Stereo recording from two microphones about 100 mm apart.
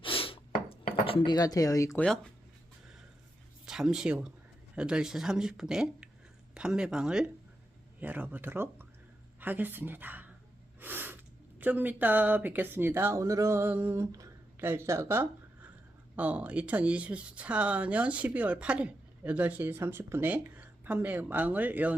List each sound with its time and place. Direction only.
0.0 s dishes: 65° left (ahead or behind); by 2.0 s 35° left (ahead or behind)
3.7 s speech: 5° right (ahead or behind)
10.8 s snort: 20° right (ahead or behind)
11.6 s speech: 20° right (ahead or behind)
13.9 s a sound: 35° right (ahead or behind)
14.6 s speech: 25° right (ahead or behind)